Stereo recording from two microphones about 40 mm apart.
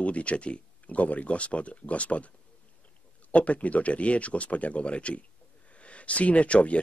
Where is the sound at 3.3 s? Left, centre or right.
Left.